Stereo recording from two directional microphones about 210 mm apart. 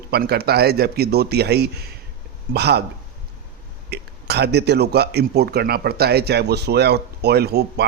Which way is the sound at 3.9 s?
50° right (ahead or behind).